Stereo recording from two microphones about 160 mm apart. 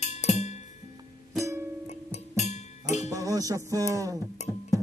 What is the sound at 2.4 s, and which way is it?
Music, 45° left (ahead or behind).